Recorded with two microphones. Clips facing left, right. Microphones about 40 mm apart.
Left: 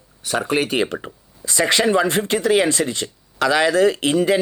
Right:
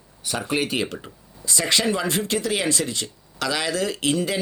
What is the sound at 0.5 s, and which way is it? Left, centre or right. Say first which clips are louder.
Speech: left 3 dB; centre.